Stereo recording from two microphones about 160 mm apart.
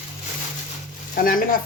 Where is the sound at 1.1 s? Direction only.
60° left (ahead or behind).